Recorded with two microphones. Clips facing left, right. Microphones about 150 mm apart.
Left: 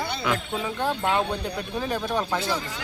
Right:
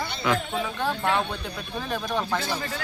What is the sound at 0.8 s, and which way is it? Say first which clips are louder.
A man's voice: left 2 dB; 10° left (ahead or behind).